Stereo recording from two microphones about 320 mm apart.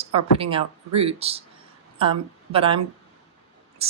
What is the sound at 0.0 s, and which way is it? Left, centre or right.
A woman's voice, centre.